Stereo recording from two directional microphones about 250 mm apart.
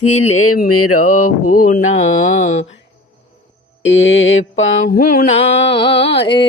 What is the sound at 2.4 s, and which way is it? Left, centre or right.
Music, left.